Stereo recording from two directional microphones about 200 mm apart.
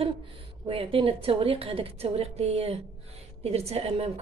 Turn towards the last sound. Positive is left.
turn(degrees=-30)  # may be behind; listen again after turning